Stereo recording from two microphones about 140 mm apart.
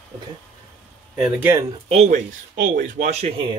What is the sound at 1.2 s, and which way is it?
Speech, 10° right (ahead or behind).